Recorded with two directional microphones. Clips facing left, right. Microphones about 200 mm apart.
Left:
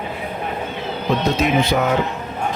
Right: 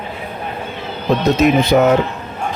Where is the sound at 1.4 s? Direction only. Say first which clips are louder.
Right 6 dB; 45° right (ahead or behind).